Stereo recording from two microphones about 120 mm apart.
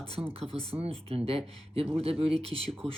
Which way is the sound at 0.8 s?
55° right (ahead or behind).